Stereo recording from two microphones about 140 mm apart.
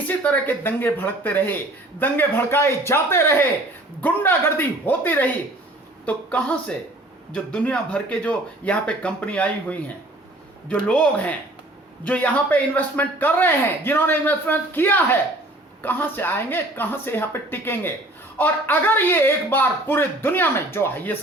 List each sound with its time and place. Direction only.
0.1 s speech: 10° left (ahead or behind)